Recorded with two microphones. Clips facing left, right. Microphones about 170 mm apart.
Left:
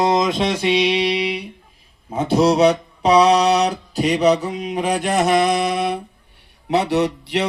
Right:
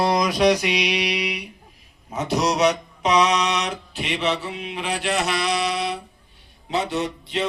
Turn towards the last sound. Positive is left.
turn(degrees=70)  # may be behind; listen again after turning